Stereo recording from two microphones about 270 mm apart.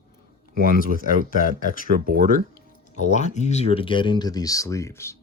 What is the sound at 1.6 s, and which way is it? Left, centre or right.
Speech, left.